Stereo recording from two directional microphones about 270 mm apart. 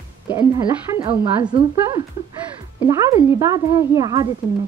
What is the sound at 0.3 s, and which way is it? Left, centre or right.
Speech, centre.